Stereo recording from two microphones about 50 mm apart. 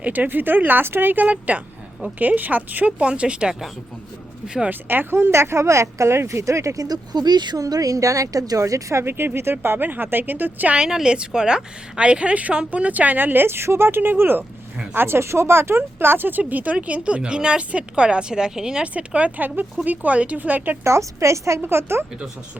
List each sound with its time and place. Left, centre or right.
0.0 s speech: right
3.0 s a woman's voice: right
4.7 s speech: right
9.0 s speech: right
10.8 s a woman's voice: centre; by 14.4 s right
14.9 s speech: right
16.4 s a woman's voice: right; by 18.9 s centre
18.9 s speech: right
20.8 s a woman's voice: right
21.6 s speech: right